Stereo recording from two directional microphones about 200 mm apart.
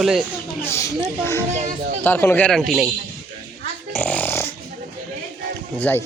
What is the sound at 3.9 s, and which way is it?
Snoring, 10° left (ahead or behind).